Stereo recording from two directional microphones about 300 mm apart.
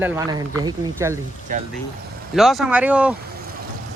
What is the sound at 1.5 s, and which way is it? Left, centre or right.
Speech, right.